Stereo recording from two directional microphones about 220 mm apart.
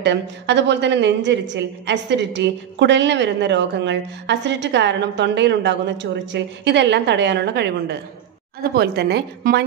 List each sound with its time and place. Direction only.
0.0 s a woman's voice: 50° right (ahead or behind)